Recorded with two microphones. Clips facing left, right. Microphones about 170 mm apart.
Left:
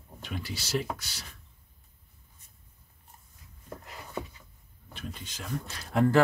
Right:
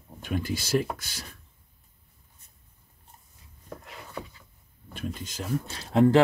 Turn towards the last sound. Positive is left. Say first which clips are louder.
# right 5 dB
turn(degrees=-25)  # may be behind; listen again after turning